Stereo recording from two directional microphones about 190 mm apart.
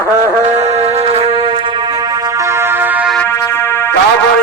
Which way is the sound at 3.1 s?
10° left (ahead or behind).